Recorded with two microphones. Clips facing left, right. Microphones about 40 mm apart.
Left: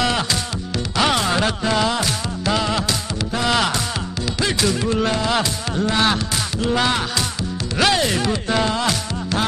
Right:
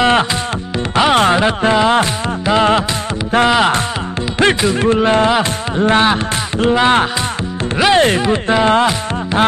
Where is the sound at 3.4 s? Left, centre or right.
Right.